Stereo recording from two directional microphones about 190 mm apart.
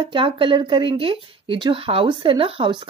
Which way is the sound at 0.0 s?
25° right (ahead or behind).